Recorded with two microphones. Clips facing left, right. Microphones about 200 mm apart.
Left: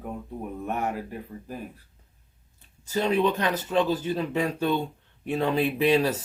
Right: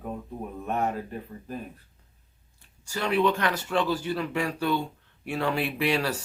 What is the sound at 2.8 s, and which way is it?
Speech, 20° left (ahead or behind).